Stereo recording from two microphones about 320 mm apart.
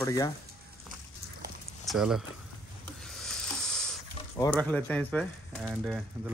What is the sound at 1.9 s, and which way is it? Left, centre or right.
Speech, centre.